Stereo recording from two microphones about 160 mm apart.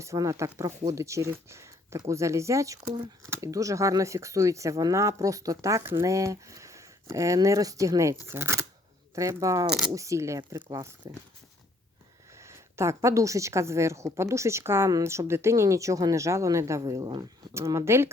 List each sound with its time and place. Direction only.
0.0 s speech: 20° right (ahead or behind)
9.6 s speech: 5° right (ahead or behind)
9.9 s speech: 20° right (ahead or behind)
12.4 s speech: 15° right (ahead or behind)